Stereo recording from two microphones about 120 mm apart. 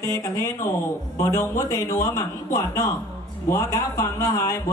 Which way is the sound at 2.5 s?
30° left (ahead or behind).